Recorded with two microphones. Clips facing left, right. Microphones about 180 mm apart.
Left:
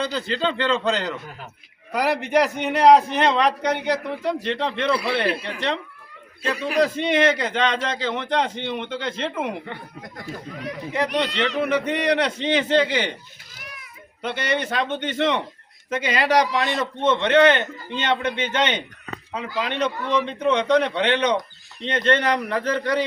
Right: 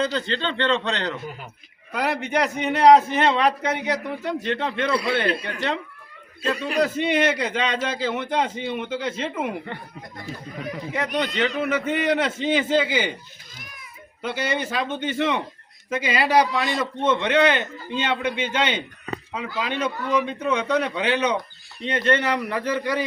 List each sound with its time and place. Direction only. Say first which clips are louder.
0.0 s a man's voice: left 1 dB; centre (ahead or behind)
11.6 s a man's voice: left 3 dB; centre (ahead or behind)
13.6 s a sound: left 4 dB; 75° left (ahead or behind)
14.2 s a man's voice: left 1 dB; 10° right (ahead or behind)